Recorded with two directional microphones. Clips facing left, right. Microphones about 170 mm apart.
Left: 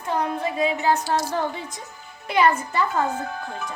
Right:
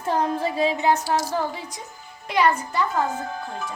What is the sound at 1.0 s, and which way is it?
A woman's voice, 5° right (ahead or behind).